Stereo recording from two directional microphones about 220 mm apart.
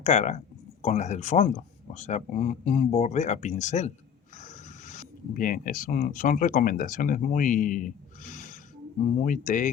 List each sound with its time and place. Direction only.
0.0 s speech: 30° left (ahead or behind)